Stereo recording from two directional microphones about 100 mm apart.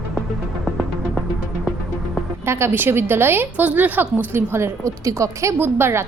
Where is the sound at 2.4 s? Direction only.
25° right (ahead or behind).